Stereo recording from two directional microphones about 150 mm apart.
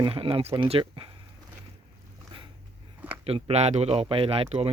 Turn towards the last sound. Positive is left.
turn(degrees=-40)  # may be behind; listen again after turning